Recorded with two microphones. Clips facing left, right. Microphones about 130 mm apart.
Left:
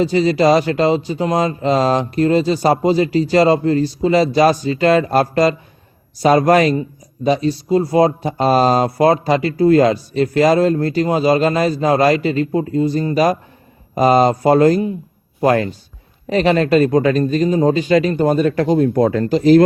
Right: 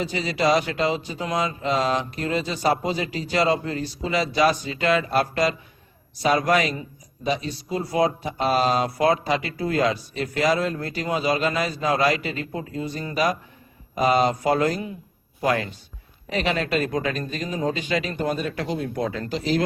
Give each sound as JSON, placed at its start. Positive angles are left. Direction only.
{"t": 0.0, "sound": "speech", "side_deg": 40}